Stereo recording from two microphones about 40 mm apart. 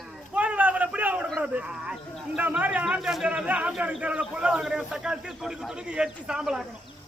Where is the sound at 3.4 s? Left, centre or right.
Right; by 6.6 s centre.